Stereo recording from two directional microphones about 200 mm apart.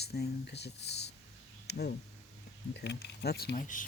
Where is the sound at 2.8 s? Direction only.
55° left (ahead or behind); by 3.8 s 40° left (ahead or behind).